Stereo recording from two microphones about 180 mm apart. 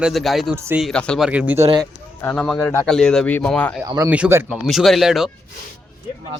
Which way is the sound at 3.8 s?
20° right (ahead or behind).